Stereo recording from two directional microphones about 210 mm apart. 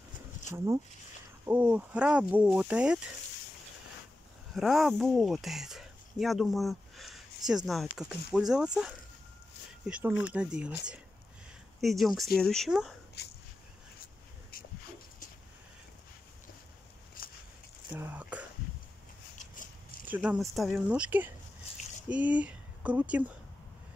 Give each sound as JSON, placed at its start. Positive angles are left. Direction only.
{"t": 1.4, "sound": "speech", "side_deg": -10}
{"t": 4.6, "sound": "speech", "side_deg": 0}
{"t": 9.8, "sound": "speech", "side_deg": -5}
{"t": 13.2, "sound": "speech", "side_deg": 50}
{"t": 14.5, "sound": "a sound", "side_deg": 45}
{"t": 17.2, "sound": "a sound", "side_deg": 45}
{"t": 17.9, "sound": "speech", "side_deg": -10}
{"t": 20.1, "sound": "speech", "side_deg": -5}